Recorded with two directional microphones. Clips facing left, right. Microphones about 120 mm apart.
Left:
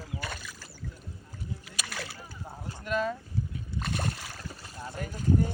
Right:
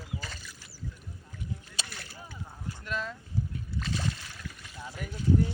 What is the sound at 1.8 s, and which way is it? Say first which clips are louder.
Boat: left 7 dB; 90° left.